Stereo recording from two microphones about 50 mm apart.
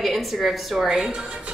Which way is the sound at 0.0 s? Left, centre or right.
Centre.